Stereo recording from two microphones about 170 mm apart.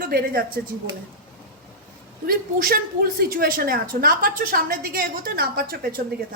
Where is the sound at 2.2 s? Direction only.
55° right (ahead or behind).